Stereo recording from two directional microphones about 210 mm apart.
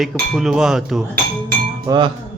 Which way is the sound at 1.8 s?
20° right (ahead or behind).